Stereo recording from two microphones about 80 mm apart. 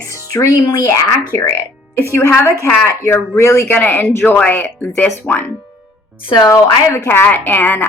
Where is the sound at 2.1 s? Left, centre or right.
Left.